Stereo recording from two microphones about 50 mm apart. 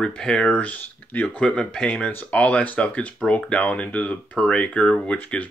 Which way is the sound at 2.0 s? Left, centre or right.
Left.